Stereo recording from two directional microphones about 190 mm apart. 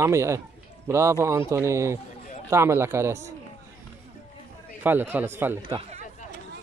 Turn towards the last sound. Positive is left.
turn(degrees=-10)  # may be behind; listen again after turning